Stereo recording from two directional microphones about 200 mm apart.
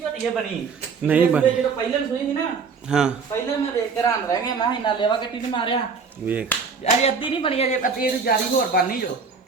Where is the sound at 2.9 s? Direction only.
5° right (ahead or behind).